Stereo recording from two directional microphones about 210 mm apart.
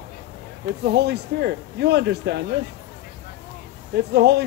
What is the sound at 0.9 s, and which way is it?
Speech, 50° right (ahead or behind).